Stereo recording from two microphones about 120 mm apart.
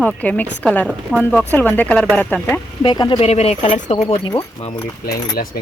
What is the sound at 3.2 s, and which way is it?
Speech, 60° left (ahead or behind).